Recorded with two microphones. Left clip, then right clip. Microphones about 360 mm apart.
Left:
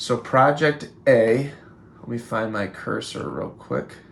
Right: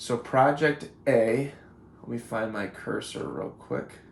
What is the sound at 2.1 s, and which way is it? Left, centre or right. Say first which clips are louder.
Speech: left 5 dB; centre.